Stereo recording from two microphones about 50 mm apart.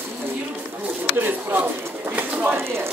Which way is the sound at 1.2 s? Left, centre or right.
Right.